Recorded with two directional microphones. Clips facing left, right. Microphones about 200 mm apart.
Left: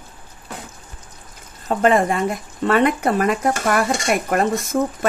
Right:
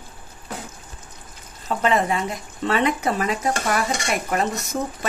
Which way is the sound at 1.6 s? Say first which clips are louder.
Left 5 dB; 50° left (ahead or behind).